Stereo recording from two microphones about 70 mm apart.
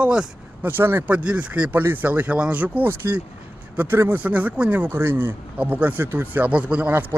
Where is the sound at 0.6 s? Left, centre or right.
Right.